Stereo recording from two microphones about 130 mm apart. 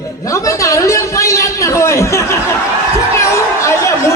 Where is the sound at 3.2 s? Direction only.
20° left (ahead or behind).